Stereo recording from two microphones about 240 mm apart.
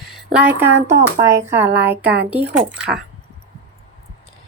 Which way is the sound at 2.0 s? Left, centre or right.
Right.